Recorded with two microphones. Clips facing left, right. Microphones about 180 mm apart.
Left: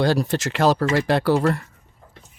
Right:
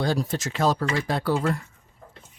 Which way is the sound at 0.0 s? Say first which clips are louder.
Left 5 dB; 75° left (ahead or behind).